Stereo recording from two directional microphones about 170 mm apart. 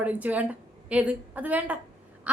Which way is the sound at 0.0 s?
10° right (ahead or behind).